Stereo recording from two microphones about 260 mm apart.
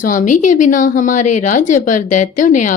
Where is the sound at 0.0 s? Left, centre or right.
Left.